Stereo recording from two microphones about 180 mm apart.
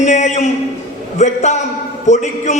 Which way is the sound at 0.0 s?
40° left (ahead or behind).